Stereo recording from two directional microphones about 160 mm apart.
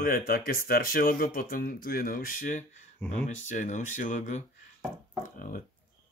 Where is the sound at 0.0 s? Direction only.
65° left (ahead or behind).